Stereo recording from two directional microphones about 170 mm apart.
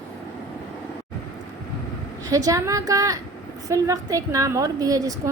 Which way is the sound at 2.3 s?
20° right (ahead or behind).